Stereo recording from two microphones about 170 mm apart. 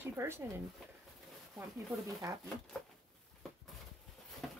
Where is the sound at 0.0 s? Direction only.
15° right (ahead or behind).